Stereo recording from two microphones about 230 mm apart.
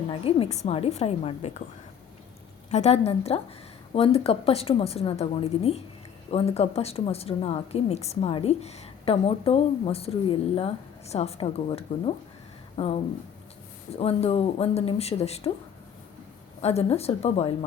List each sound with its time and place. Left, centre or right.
0.1 s speech: left
2.6 s speech: left
16.6 s speech: left